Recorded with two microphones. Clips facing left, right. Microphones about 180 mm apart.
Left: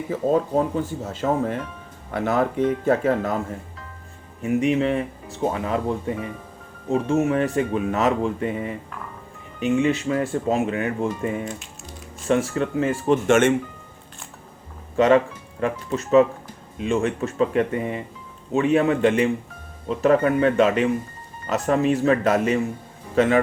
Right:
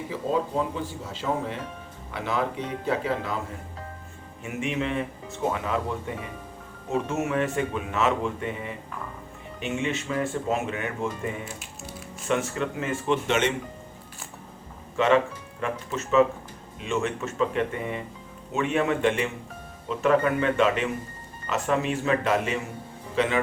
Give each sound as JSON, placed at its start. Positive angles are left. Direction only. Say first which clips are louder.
{"t": 0.1, "sound": "speech", "louder": "left 6 dB", "side_deg": 45}
{"t": 4.4, "sound": "speech", "louder": "left 9 dB", "side_deg": 35}
{"t": 12.3, "sound": "speech", "louder": "left 5 dB", "side_deg": 35}
{"t": 14.9, "sound": "a man's voice", "louder": "left 5 dB", "side_deg": 40}